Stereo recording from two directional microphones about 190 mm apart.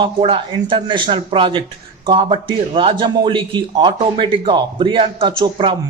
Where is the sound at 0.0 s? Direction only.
25° right (ahead or behind).